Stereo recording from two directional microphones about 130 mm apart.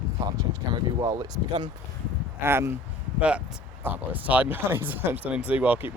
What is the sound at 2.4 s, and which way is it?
Speech, 20° right (ahead or behind).